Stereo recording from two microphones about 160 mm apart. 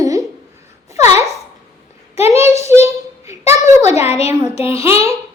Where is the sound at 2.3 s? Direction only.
15° right (ahead or behind).